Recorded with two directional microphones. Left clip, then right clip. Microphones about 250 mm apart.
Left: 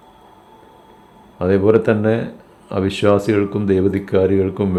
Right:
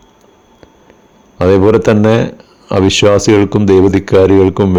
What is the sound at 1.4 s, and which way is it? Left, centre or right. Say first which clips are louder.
Speech: right 6 dB; right.